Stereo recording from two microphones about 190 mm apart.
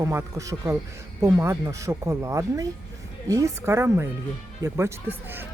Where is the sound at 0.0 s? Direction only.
15° right (ahead or behind).